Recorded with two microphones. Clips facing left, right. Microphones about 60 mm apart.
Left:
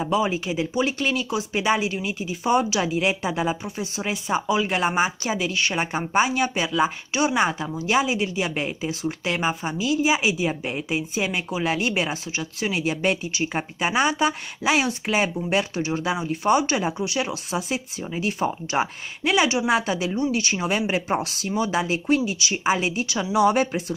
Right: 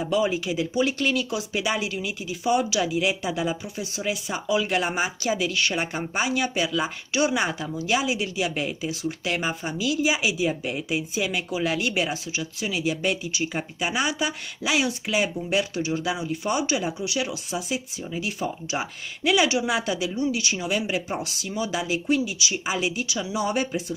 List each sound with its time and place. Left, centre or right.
0.0 s speech: left
17.3 s speech: left
19.3 s speech: left
23.3 s speech: left